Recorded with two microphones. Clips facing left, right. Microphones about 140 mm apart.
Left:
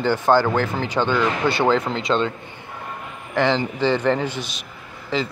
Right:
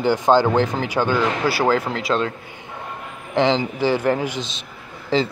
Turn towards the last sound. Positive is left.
turn(degrees=-30)  # may be behind; listen again after turning